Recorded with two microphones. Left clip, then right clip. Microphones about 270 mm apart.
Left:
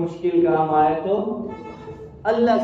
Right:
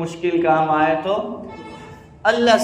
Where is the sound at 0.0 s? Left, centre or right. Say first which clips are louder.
Even; right.